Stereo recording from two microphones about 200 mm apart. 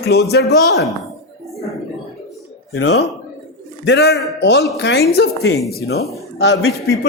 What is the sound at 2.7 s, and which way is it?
A man's voice, 60° left (ahead or behind).